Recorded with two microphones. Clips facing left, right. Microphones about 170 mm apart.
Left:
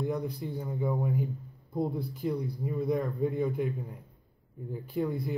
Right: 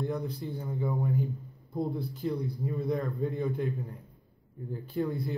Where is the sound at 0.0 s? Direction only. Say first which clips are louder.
Left 1 dB; 5° left (ahead or behind).